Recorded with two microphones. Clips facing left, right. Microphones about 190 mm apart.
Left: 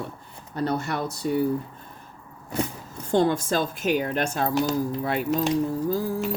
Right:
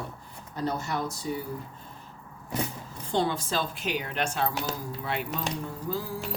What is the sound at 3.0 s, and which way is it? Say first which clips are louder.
Speech: left 6 dB; 45° left (ahead or behind).